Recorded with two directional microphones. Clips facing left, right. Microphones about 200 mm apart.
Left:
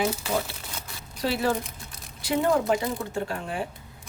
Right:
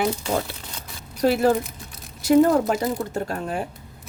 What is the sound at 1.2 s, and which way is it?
Speech, 45° right (ahead or behind).